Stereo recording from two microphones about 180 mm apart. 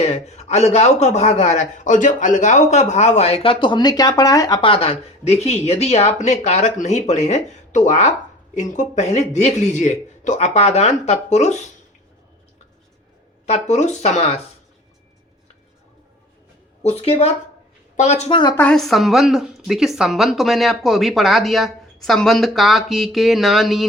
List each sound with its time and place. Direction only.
0.0 s speech: 35° left (ahead or behind)
13.4 s speech: 40° left (ahead or behind)
16.8 s speech: 35° left (ahead or behind)
18.5 s a woman's voice: 5° left (ahead or behind)